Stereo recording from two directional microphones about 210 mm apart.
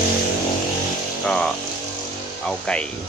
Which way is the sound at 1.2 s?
5° left (ahead or behind).